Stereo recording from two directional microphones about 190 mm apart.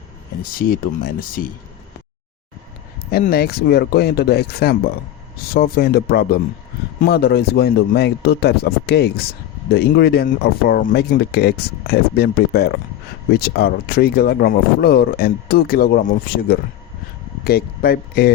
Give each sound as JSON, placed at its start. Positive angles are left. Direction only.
{"t": 0.7, "sound": "speech", "side_deg": 50}
{"t": 3.1, "sound": "speech", "side_deg": 55}